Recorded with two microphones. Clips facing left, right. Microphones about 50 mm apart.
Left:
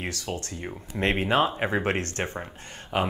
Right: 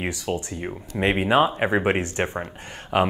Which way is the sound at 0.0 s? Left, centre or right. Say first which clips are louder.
Right 5 dB; centre.